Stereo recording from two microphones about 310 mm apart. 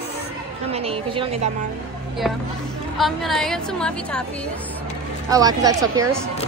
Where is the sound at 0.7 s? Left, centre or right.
Centre.